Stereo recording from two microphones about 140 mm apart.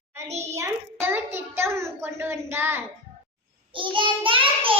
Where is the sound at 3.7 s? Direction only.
35° right (ahead or behind).